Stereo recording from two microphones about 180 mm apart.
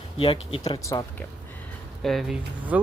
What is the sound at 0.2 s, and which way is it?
Speech, 30° left (ahead or behind).